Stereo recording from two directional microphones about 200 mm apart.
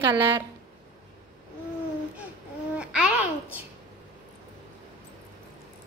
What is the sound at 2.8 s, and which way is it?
Babbling, 5° right (ahead or behind).